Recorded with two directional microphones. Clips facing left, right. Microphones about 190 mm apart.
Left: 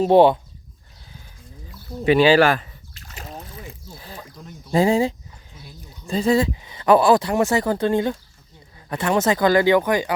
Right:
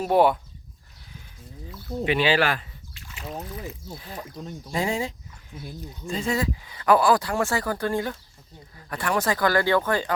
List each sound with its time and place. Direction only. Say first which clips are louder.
0.0 s speech: left 6 dB; 25° left (ahead or behind)
2.0 s a sound: left 8 dB; 40° left (ahead or behind)
3.7 s speech: right 1 dB; 30° left (ahead or behind); by 10.1 s 15° left (ahead or behind)